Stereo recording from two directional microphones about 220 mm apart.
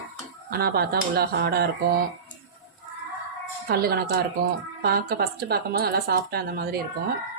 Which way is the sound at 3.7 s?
45° right (ahead or behind).